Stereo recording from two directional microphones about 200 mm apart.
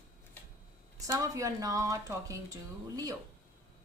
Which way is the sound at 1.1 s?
15° right (ahead or behind).